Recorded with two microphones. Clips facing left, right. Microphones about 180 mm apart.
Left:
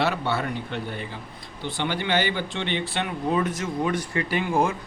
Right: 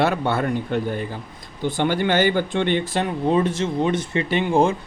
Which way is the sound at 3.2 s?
30° right (ahead or behind).